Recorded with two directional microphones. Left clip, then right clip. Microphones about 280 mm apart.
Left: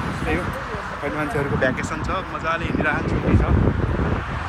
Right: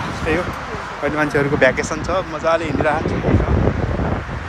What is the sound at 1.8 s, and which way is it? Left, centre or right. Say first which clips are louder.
Speech: right 5 dB; centre.